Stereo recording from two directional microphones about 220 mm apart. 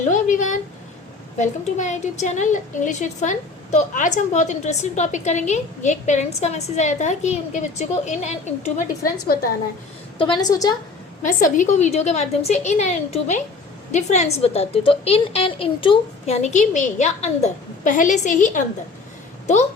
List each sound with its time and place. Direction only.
0.1 s a sound: 35° left (ahead or behind)
1.4 s a woman's voice: 35° left (ahead or behind)
9.2 s a woman's voice: 45° left (ahead or behind)
10.2 s speech: 20° left (ahead or behind)
11.2 s a woman's voice: 35° left (ahead or behind)